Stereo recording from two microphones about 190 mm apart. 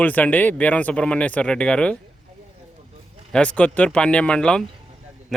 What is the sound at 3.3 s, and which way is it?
Speech, 5° left (ahead or behind).